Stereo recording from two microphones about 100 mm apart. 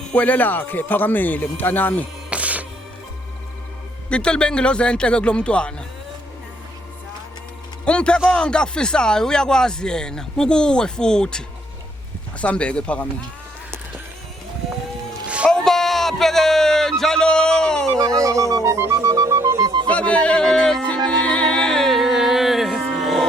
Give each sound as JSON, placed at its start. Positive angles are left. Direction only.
{"t": 0.1, "sound": "speech", "side_deg": 15}
{"t": 2.3, "sound": "music", "side_deg": -15}
{"t": 4.1, "sound": "speech", "side_deg": 10}
{"t": 7.9, "sound": "speech", "side_deg": 10}
{"t": 15.4, "sound": "a sound", "side_deg": 5}
{"t": 17.9, "sound": "music", "side_deg": -35}
{"t": 19.9, "sound": "music", "side_deg": 10}